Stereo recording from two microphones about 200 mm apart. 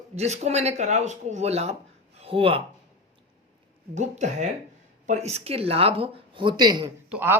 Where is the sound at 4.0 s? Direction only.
35° right (ahead or behind); by 7.4 s 10° right (ahead or behind).